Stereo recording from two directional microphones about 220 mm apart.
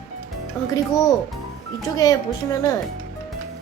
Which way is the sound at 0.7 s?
15° left (ahead or behind).